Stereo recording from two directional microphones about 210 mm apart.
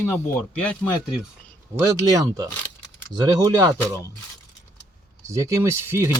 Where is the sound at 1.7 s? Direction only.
15° right (ahead or behind).